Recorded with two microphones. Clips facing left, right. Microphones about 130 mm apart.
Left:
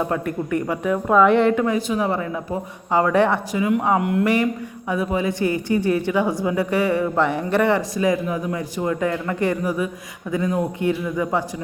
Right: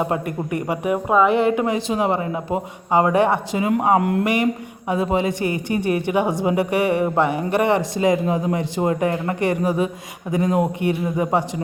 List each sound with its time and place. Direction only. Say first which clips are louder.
0.0 s speech: even; 15° right (ahead or behind)
3.8 s speech: right 2 dB; 40° right (ahead or behind)
4.2 s speech: even; 15° right (ahead or behind)